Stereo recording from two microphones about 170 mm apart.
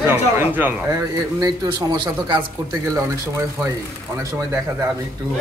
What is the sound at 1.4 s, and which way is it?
Speech, 25° right (ahead or behind).